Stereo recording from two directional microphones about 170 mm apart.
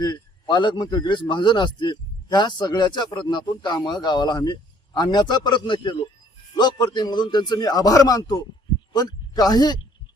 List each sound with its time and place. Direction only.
0.0 s a man's voice: 25° left (ahead or behind)